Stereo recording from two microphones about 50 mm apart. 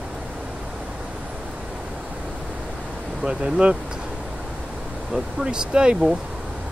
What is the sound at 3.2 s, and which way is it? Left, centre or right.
Speech, centre.